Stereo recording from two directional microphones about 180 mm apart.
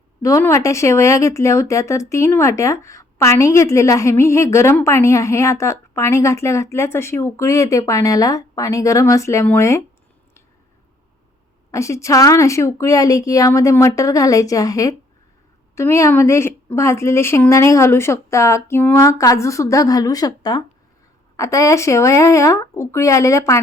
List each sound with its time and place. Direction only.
0.2 s speech: 15° left (ahead or behind)
11.7 s speech: 15° left (ahead or behind)